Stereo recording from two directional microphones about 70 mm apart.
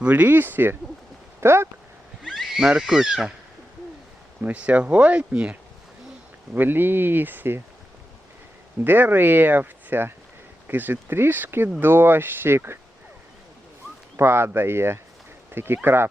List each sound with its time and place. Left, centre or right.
0.0 s speech: right
2.2 s a sound: centre
2.6 s speech: centre
4.4 s speech: right
6.5 s speech: right
8.8 s speech: right
14.2 s speech: right